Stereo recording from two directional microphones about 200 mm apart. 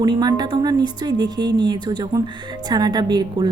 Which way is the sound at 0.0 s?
20° right (ahead or behind).